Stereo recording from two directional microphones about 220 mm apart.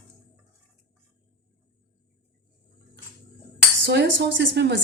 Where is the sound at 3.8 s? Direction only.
50° right (ahead or behind).